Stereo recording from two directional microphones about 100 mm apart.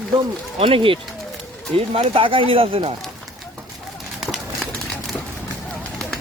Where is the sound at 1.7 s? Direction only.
75° right (ahead or behind).